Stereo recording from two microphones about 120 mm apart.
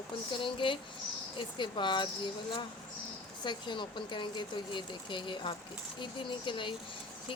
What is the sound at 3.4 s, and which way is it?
Speech, 40° left (ahead or behind).